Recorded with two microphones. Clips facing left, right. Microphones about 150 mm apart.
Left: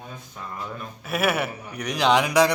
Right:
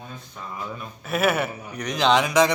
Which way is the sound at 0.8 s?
10° left (ahead or behind).